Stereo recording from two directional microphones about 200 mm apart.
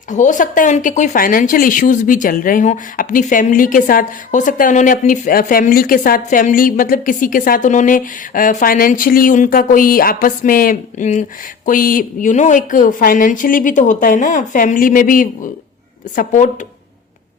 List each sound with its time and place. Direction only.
0.1 s speech: 40° left (ahead or behind)